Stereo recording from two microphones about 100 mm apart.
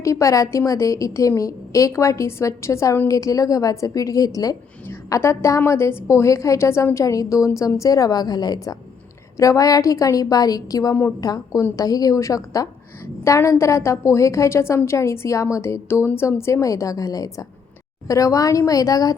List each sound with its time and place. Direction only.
0.0 s a woman's voice: 30° left (ahead or behind)